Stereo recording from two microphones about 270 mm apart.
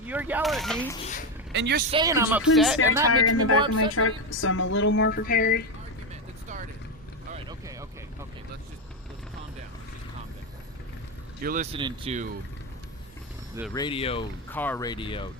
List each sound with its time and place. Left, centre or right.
0.0 s a sound: centre
0.9 s speech: left
1.5 s speech: right
1.9 s speech: centre
3.1 s speech: left
7.4 s a sound: centre
11.3 s speech: right
13.7 s speech: centre
14.5 s speech: centre